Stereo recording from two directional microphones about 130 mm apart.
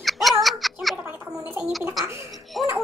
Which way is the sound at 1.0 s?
15° right (ahead or behind).